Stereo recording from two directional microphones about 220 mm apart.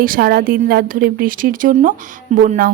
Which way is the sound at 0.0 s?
40° right (ahead or behind).